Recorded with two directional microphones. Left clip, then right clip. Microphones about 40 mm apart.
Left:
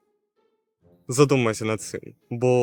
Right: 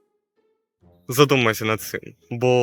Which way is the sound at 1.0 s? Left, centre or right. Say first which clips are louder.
Right 3 dB; left.